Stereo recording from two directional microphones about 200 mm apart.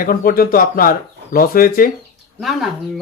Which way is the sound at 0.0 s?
45° left (ahead or behind).